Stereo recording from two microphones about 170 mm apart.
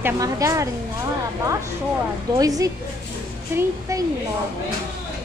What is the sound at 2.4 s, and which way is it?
A woman's voice, 20° right (ahead or behind).